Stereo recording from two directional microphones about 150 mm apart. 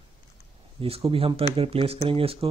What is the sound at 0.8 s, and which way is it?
Speech, 40° right (ahead or behind).